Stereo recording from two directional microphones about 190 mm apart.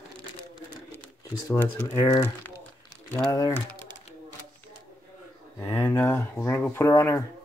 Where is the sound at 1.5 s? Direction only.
15° left (ahead or behind).